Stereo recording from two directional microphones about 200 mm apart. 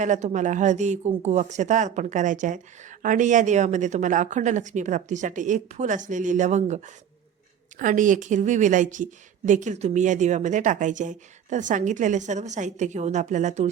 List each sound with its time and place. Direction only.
0.0 s a woman's voice: 35° right (ahead or behind)